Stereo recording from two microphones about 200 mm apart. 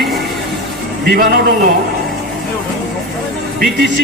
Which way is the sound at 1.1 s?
50° right (ahead or behind).